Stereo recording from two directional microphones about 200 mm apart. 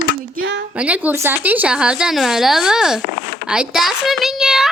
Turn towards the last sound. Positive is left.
turn(degrees=0)  # may be behind; listen again after turning